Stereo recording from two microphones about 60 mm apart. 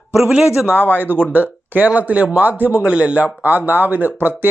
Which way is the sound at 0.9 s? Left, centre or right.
Right.